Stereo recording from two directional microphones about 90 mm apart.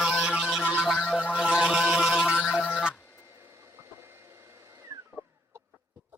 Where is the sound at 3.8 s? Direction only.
30° right (ahead or behind).